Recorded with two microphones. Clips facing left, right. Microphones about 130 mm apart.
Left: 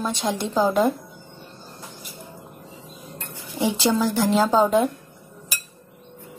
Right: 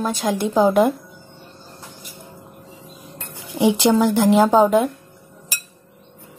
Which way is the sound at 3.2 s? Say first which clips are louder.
Right 6 dB; 20° right (ahead or behind).